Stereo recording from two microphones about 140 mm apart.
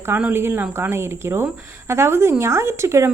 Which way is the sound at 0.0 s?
15° right (ahead or behind).